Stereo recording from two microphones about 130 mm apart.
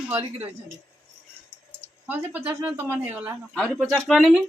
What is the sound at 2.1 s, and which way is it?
Speech, 15° right (ahead or behind).